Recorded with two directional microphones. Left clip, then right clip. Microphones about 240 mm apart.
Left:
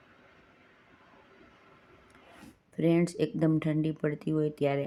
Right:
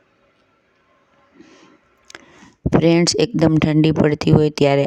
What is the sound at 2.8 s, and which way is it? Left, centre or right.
Speech, right.